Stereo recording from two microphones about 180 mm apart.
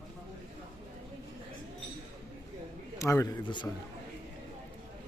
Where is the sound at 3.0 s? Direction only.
20° left (ahead or behind).